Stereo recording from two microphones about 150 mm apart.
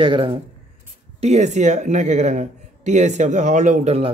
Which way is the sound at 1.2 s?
50° right (ahead or behind).